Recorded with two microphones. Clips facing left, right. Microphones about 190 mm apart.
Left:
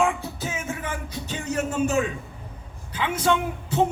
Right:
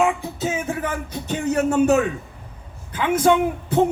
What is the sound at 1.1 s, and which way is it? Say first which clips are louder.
Speech: right 7 dB; 50° right (ahead or behind).